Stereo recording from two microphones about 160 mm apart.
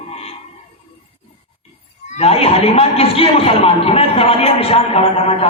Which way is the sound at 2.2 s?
40° left (ahead or behind).